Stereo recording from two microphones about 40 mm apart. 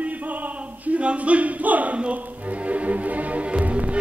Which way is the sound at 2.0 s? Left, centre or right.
Right.